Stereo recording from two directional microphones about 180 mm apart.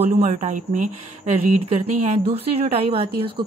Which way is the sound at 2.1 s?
35° right (ahead or behind).